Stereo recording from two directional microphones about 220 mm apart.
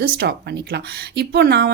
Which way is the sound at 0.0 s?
45° right (ahead or behind).